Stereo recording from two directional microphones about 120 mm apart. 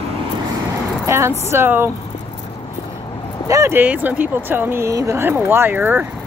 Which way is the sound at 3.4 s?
25° right (ahead or behind).